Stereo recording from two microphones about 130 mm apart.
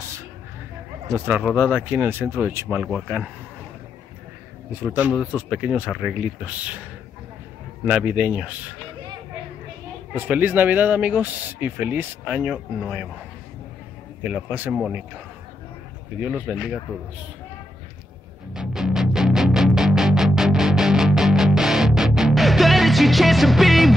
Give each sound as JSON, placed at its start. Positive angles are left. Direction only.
{"t": 1.1, "sound": "speech", "side_deg": -15}
{"t": 1.4, "sound": "speech", "side_deg": 5}
{"t": 1.9, "sound": "speech", "side_deg": -15}
{"t": 4.8, "sound": "speech", "side_deg": -10}
{"t": 5.1, "sound": "speech", "side_deg": 0}
{"t": 6.4, "sound": "speech", "side_deg": -10}
{"t": 7.8, "sound": "speech", "side_deg": -10}
{"t": 10.1, "sound": "speech", "side_deg": -15}
{"t": 14.2, "sound": "speech", "side_deg": -10}
{"t": 14.7, "sound": "speech", "side_deg": 0}
{"t": 16.3, "sound": "speech", "side_deg": -5}
{"t": 18.5, "sound": "music", "side_deg": -5}